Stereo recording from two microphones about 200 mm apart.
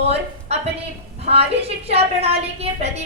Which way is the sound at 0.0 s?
30° right (ahead or behind).